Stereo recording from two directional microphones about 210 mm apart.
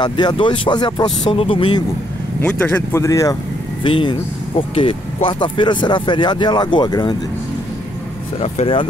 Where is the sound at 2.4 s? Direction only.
10° left (ahead or behind).